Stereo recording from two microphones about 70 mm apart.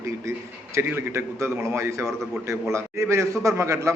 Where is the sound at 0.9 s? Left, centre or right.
Right.